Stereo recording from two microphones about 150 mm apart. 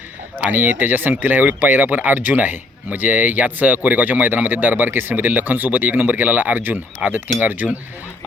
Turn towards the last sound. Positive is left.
turn(degrees=-10)  # may be behind; listen again after turning